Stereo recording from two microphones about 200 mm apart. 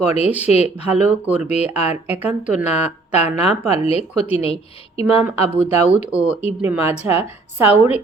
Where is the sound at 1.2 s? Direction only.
5° right (ahead or behind).